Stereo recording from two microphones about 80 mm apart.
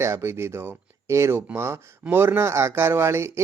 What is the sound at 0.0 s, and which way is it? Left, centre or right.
A man's voice, right.